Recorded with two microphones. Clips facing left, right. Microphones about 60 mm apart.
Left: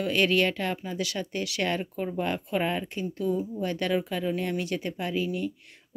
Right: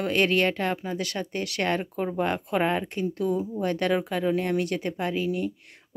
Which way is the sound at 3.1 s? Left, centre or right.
Right.